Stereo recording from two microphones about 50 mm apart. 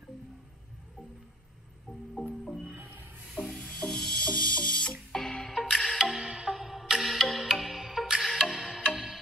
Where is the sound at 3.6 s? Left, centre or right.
Left.